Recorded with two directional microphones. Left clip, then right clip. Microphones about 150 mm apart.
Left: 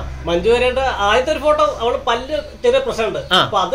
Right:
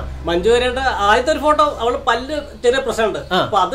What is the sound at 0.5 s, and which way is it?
Speech, 90° right.